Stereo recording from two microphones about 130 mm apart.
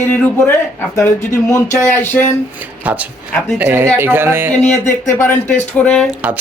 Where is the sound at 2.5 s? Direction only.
10° right (ahead or behind).